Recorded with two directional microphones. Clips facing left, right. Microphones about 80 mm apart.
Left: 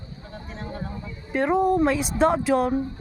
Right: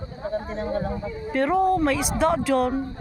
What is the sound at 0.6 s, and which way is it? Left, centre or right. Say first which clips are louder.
Speech: right 4 dB; right.